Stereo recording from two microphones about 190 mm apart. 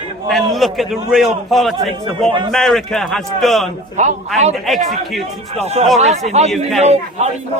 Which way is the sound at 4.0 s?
40° right (ahead or behind).